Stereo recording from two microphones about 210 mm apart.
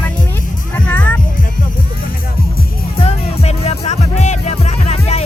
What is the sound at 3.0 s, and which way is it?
Music, 30° left (ahead or behind).